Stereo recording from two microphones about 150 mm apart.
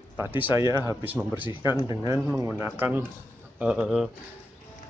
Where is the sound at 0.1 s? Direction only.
10° right (ahead or behind).